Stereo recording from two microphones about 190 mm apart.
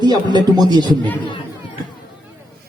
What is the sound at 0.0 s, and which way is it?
Speech, 20° right (ahead or behind).